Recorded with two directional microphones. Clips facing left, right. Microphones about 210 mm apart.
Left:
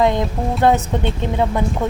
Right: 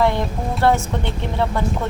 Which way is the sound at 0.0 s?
15° left (ahead or behind).